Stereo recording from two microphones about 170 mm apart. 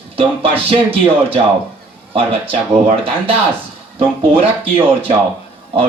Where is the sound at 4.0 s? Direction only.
30° right (ahead or behind).